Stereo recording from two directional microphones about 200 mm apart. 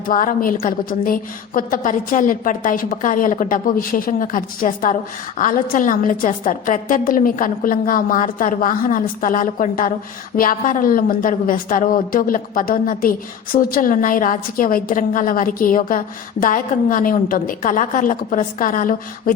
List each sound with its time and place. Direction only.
0.1 s a woman's voice: 40° left (ahead or behind)